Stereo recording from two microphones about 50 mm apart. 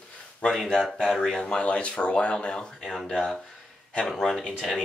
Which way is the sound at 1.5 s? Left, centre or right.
Left.